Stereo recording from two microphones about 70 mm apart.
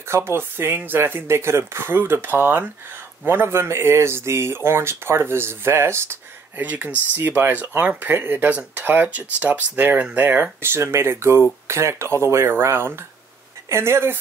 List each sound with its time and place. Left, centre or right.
0.1 s speech: right
6.6 s speech: right